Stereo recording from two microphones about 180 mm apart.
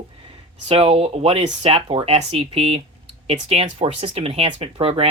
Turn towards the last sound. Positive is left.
turn(degrees=-30)  # may be behind; listen again after turning